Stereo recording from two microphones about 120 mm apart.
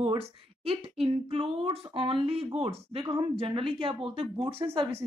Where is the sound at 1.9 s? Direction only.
50° right (ahead or behind).